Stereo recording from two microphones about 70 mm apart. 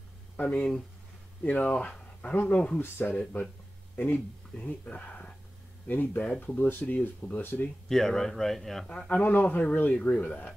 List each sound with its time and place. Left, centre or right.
0.4 s speech: centre
2.8 s speech: left
5.9 s speech: left
7.9 s speech: centre
8.8 s speech: centre
9.1 s speech: left